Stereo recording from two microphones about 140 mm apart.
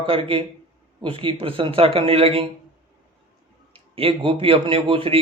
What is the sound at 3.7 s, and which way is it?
Speech, 40° right (ahead or behind).